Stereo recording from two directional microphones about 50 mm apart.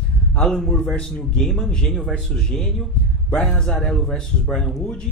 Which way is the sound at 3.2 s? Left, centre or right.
Left.